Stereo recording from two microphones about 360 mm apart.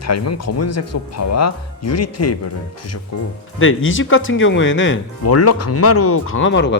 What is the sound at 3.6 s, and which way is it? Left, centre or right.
Speech, left.